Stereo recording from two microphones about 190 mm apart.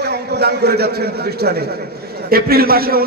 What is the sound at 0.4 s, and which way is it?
Speech, 60° right (ahead or behind).